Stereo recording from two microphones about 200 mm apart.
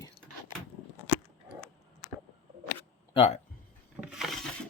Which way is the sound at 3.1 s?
30° left (ahead or behind).